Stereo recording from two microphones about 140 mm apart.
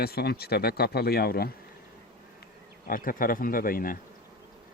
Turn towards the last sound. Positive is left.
turn(degrees=90)